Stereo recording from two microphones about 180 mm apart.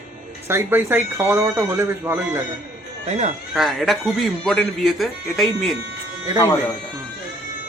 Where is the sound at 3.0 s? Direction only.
40° right (ahead or behind).